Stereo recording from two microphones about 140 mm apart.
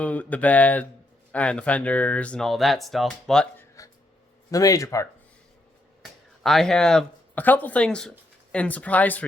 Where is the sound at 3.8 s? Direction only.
25° left (ahead or behind).